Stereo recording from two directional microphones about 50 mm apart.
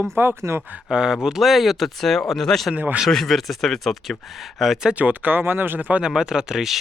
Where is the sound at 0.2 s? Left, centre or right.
Right.